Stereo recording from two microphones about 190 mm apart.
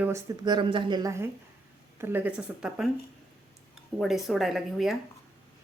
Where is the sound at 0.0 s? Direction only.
20° right (ahead or behind).